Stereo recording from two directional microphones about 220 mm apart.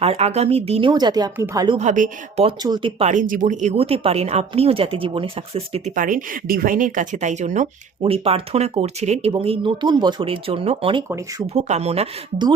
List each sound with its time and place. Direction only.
0.0 s speech: 30° right (ahead or behind)
1.8 s speech: 35° right (ahead or behind)